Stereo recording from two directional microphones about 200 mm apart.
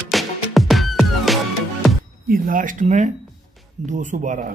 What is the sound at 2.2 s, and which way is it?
Speech, 45° right (ahead or behind).